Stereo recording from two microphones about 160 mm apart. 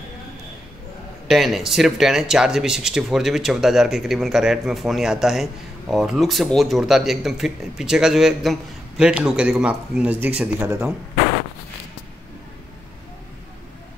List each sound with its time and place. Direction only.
1.2 s speech: centre (ahead or behind)